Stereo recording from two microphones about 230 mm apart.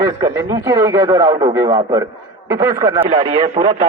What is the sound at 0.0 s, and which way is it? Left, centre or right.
A man's voice, centre.